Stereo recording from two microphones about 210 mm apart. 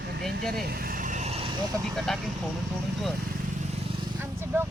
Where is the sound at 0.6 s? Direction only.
45° right (ahead or behind); by 1.5 s 30° right (ahead or behind).